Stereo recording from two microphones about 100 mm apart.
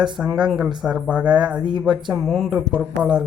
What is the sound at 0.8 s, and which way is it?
Speech, 10° right (ahead or behind).